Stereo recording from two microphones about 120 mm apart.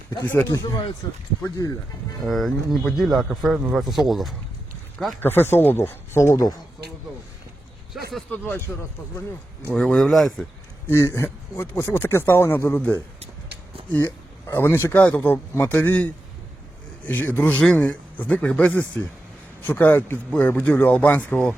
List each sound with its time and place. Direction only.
0.7 s speech: 40° left (ahead or behind)
1.5 s speech: 30° left (ahead or behind)
2.2 s speech: centre (ahead or behind)
5.2 s speech: 20° left (ahead or behind)
7.9 s speech: 5° right (ahead or behind)
8.3 s speech: 15° left (ahead or behind)
9.7 s speech: 5° left (ahead or behind)
10.8 s speech: 20° left (ahead or behind)
17.1 s speech: 15° left (ahead or behind)